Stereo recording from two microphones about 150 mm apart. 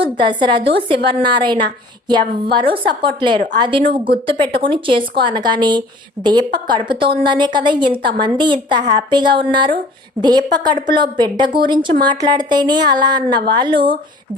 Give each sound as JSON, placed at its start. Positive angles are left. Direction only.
{"t": 0.0, "sound": "a woman's voice", "side_deg": -35}